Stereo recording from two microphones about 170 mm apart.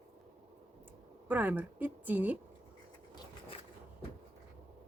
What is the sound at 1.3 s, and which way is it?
Speech, 10° right (ahead or behind).